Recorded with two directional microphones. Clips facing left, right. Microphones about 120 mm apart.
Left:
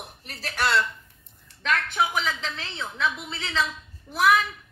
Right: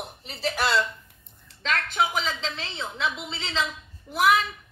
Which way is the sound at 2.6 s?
20° right (ahead or behind).